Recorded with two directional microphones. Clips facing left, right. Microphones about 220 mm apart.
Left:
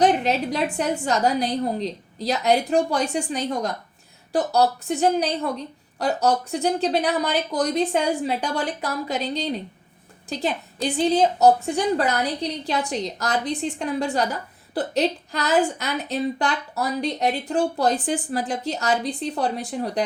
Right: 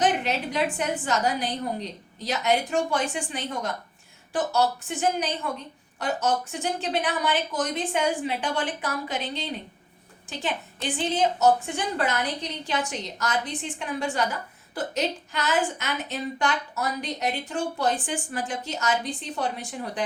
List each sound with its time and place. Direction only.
0.0 s a woman's voice: 35° left (ahead or behind)